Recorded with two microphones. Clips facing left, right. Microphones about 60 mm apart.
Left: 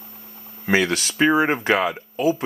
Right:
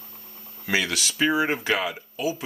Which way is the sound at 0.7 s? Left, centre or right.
Left.